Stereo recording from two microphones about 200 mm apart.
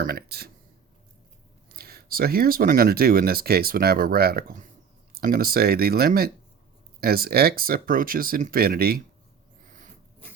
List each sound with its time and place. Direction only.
0.0 s speech: 50° right (ahead or behind)
1.7 s speech: 50° right (ahead or behind)